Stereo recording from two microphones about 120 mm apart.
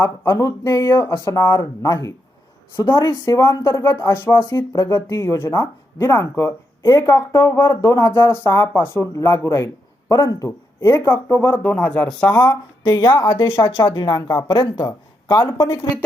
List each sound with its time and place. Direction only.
0.0 s speech: 25° left (ahead or behind)
4.0 s speech: 15° left (ahead or behind)
12.4 s speech: 35° left (ahead or behind)